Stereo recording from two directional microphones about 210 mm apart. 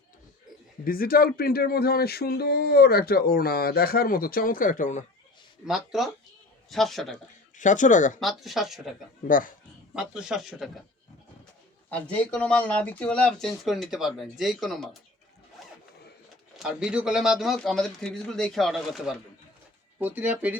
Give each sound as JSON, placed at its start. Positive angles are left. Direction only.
{"t": 0.9, "sound": "speech", "side_deg": 45}
{"t": 5.6, "sound": "speech", "side_deg": 0}
{"t": 7.5, "sound": "speech", "side_deg": 35}
{"t": 8.2, "sound": "speech", "side_deg": 0}
{"t": 9.2, "sound": "speech", "side_deg": 40}
{"t": 9.9, "sound": "speech", "side_deg": -5}
{"t": 12.1, "sound": "speech", "side_deg": 5}
{"t": 15.6, "sound": "zipper", "side_deg": 0}
{"t": 16.6, "sound": "speech", "side_deg": -5}